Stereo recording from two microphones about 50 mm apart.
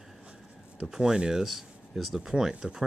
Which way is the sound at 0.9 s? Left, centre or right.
Centre.